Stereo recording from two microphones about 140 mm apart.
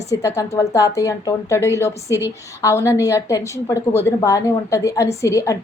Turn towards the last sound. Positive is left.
turn(degrees=20)  # may be behind; listen again after turning